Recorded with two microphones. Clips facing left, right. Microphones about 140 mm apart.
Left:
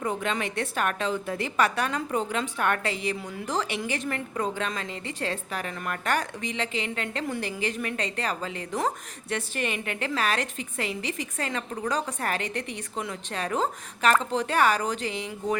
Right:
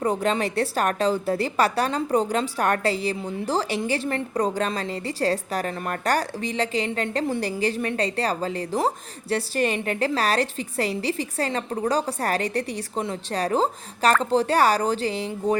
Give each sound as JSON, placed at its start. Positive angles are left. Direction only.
{"t": 0.0, "sound": "a woman's voice", "side_deg": -35}